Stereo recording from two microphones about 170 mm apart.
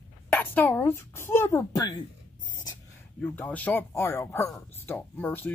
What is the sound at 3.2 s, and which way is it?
Speech, 10° left (ahead or behind).